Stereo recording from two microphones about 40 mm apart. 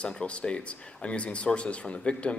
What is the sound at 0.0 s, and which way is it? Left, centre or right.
Speech, left.